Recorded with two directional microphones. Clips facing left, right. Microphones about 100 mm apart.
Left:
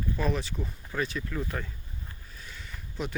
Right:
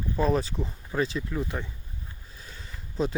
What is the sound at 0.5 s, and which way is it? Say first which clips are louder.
Speech: right 4 dB; 25° right (ahead or behind).